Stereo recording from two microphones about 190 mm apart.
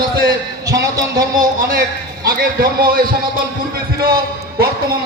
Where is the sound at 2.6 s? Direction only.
50° right (ahead or behind).